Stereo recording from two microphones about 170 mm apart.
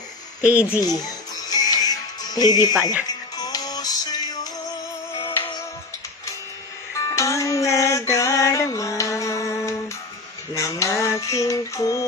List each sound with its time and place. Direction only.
0.4 s a child's voice: 10° right (ahead or behind)
0.7 s music: 20° left (ahead or behind)
5.2 s music: 15° left (ahead or behind)
7.0 s music: 20° left (ahead or behind)